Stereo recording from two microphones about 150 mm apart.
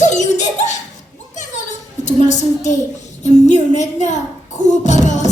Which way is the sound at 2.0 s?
50° left (ahead or behind).